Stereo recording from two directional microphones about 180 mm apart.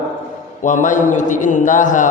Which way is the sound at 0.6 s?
45° left (ahead or behind).